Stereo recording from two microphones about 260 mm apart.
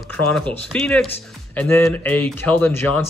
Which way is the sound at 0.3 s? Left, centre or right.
Centre.